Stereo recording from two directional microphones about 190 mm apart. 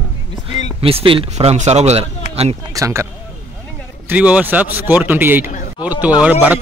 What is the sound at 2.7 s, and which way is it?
Speech, 15° right (ahead or behind).